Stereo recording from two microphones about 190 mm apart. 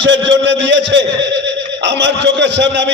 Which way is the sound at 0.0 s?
70° right (ahead or behind).